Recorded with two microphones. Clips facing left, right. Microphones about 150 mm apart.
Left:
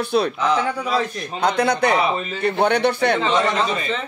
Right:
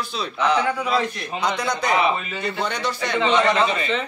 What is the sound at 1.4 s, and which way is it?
Speech, 60° left (ahead or behind).